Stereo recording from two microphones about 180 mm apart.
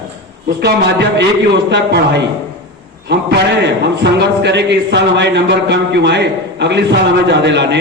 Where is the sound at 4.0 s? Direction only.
70° right (ahead or behind).